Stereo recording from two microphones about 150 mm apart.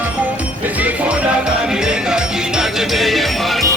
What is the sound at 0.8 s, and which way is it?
Music, 5° right (ahead or behind).